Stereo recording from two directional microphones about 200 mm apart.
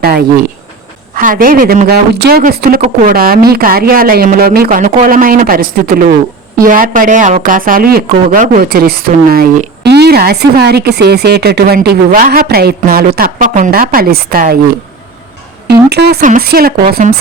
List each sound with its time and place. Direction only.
1.1 s speech: 45° right (ahead or behind)
15.6 s speech: 55° right (ahead or behind)